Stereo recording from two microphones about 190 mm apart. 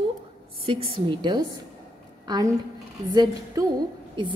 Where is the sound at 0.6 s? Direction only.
30° right (ahead or behind).